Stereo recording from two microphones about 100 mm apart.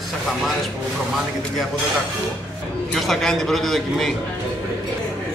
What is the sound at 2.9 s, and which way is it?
A man's voice, 5° left (ahead or behind).